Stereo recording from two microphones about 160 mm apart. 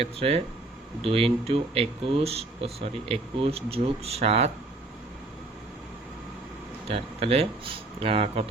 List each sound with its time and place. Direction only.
0.0 s speech: 40° right (ahead or behind)
6.8 s speech: 40° right (ahead or behind)